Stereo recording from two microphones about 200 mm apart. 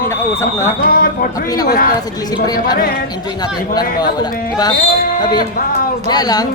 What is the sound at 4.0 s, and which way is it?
A man's voice, 20° left (ahead or behind).